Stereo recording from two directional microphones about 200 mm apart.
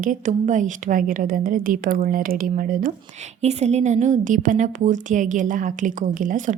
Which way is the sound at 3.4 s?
35° right (ahead or behind).